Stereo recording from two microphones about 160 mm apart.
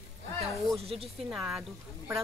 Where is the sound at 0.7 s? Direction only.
40° right (ahead or behind).